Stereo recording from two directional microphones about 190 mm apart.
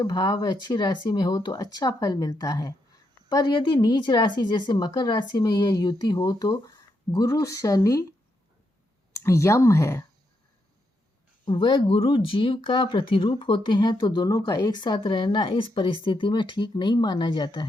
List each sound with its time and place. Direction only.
0.0 s speech: 20° left (ahead or behind)
9.1 s speech: 15° left (ahead or behind)
11.4 s speech: 25° left (ahead or behind)